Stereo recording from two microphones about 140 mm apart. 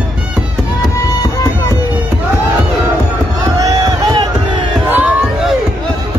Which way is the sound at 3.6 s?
25° right (ahead or behind).